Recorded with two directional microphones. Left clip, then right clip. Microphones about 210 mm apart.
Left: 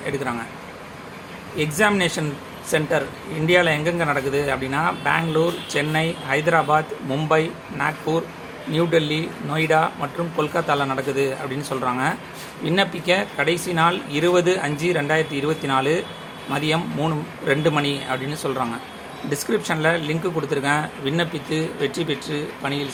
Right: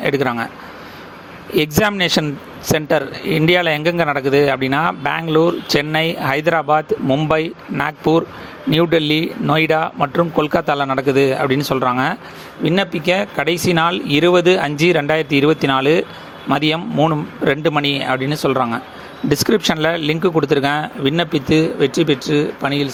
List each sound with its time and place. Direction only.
0.0 s speech: 40° right (ahead or behind)
1.5 s speech: 45° right (ahead or behind)
3.4 s speech: 45° right (ahead or behind)